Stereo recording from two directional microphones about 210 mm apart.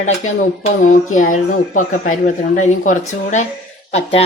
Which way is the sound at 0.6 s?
35° left (ahead or behind).